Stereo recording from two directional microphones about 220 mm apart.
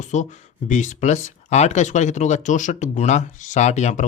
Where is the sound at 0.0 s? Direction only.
35° left (ahead or behind).